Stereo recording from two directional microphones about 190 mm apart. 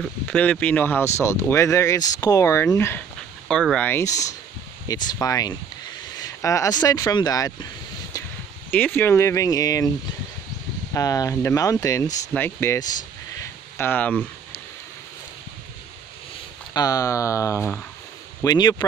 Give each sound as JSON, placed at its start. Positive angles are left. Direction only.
{"t": 0.0, "sound": "speech", "side_deg": 5}
{"t": 3.4, "sound": "speech", "side_deg": 5}
{"t": 8.6, "sound": "speech", "side_deg": 10}
{"t": 10.9, "sound": "speech", "side_deg": 20}
{"t": 16.7, "sound": "speech", "side_deg": 20}